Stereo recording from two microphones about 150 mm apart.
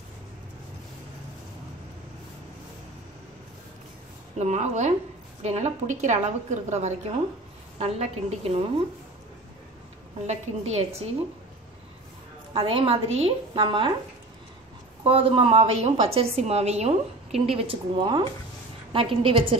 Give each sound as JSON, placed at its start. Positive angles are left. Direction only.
{"t": 4.4, "sound": "a woman's voice", "side_deg": -50}
{"t": 10.2, "sound": "a woman's voice", "side_deg": -50}
{"t": 12.5, "sound": "a woman's voice", "side_deg": -40}
{"t": 15.0, "sound": "a woman's voice", "side_deg": -35}